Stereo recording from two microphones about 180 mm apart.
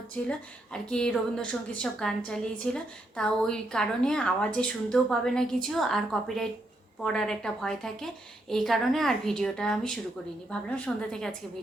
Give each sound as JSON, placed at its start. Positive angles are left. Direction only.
{"t": 0.3, "sound": "a woman's voice", "side_deg": 5}